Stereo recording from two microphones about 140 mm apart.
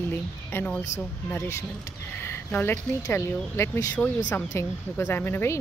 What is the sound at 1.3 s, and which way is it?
Speech, 15° left (ahead or behind).